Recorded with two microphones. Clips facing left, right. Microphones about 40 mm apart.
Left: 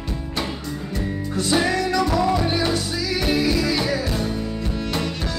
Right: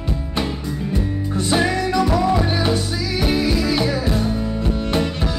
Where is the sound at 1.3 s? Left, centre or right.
Centre.